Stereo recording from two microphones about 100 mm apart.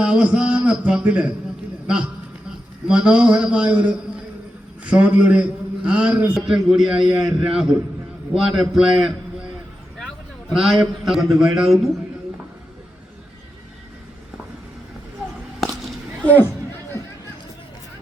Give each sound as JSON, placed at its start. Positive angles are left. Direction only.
{"t": 0.0, "sound": "a man's voice", "side_deg": -10}
{"t": 2.8, "sound": "a man's voice", "side_deg": -10}
{"t": 6.3, "sound": "a man's voice", "side_deg": -5}
{"t": 16.2, "sound": "speech", "side_deg": 20}